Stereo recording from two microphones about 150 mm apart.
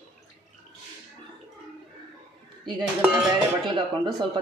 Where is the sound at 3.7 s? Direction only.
35° right (ahead or behind).